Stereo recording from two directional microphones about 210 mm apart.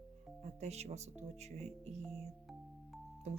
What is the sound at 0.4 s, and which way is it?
Speech, 30° right (ahead or behind).